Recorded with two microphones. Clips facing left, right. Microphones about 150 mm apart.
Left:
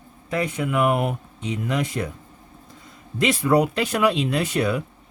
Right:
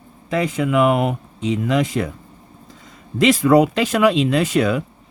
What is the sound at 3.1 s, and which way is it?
Speech, 90° right.